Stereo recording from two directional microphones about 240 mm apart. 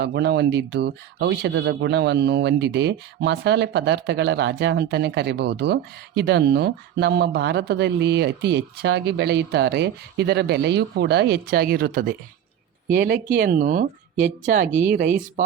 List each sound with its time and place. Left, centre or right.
0.0 s speech: right